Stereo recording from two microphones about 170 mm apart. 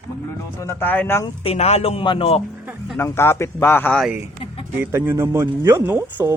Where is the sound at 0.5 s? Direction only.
15° left (ahead or behind).